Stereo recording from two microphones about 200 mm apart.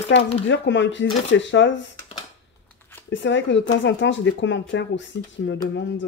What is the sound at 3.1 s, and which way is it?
Speech, 65° left (ahead or behind).